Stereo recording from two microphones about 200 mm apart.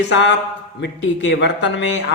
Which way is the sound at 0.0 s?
60° left (ahead or behind).